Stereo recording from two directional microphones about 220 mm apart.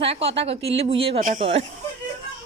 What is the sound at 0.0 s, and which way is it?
A woman's voice, 25° right (ahead or behind).